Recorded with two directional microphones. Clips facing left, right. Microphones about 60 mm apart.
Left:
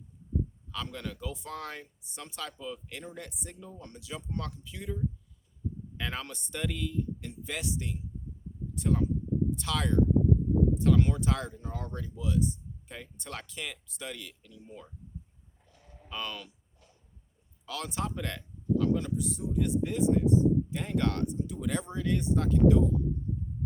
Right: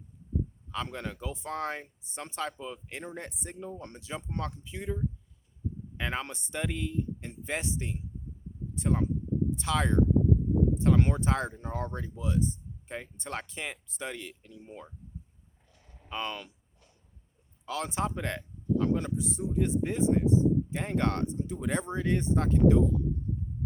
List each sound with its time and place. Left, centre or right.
0.7 s speech: right
8.7 s a sound: right
9.6 s speech: right
16.0 s speech: right
17.7 s speech: right